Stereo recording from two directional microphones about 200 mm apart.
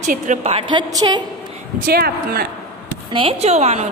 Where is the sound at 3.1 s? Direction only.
25° right (ahead or behind).